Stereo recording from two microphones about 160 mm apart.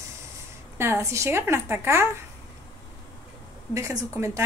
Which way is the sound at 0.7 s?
15° right (ahead or behind).